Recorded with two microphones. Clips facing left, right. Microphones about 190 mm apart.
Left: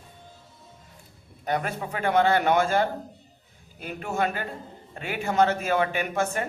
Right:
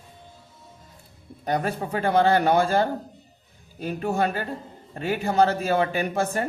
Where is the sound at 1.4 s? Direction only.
35° right (ahead or behind).